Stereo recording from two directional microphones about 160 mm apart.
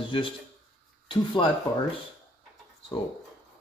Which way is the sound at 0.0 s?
30° left (ahead or behind).